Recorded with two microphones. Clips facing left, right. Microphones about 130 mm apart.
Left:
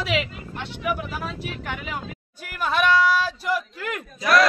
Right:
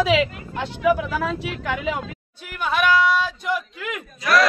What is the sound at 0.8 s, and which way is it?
Speech, 90° right.